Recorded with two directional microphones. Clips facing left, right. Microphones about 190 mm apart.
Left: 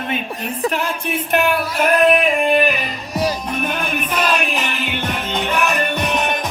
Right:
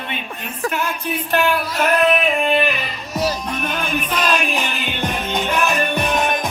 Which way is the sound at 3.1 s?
15° left (ahead or behind).